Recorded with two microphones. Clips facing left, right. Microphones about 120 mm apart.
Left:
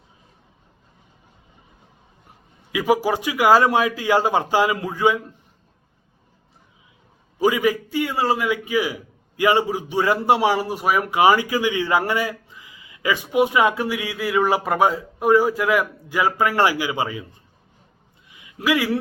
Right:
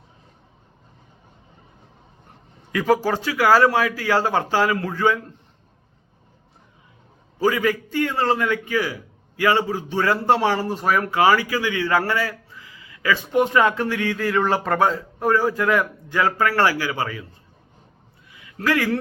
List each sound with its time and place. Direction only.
2.7 s a man's voice: 10° left (ahead or behind)
7.3 s a man's voice: 15° left (ahead or behind)
18.3 s a sound: 20° left (ahead or behind)